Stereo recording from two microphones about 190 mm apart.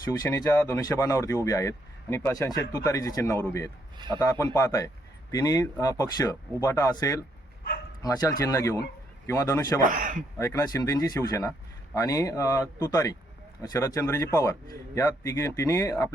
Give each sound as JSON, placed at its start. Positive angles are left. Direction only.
{"t": 0.0, "sound": "speech", "side_deg": 20}
{"t": 3.9, "sound": "a man's voice", "side_deg": -25}
{"t": 4.2, "sound": "speech", "side_deg": 15}
{"t": 9.8, "sound": "speech", "side_deg": -45}
{"t": 10.3, "sound": "speech", "side_deg": 15}